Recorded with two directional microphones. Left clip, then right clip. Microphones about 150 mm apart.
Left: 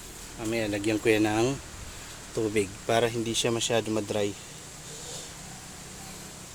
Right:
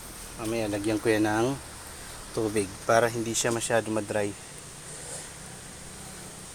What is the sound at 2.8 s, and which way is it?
Speech, 25° left (ahead or behind).